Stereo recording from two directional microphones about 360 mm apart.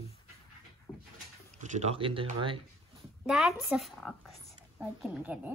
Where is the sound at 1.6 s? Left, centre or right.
Centre.